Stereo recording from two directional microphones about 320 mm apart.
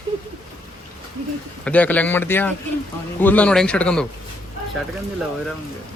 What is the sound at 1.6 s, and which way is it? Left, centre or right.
Speech, centre.